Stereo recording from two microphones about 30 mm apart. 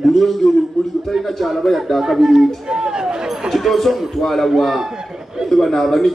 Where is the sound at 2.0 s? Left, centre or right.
Centre.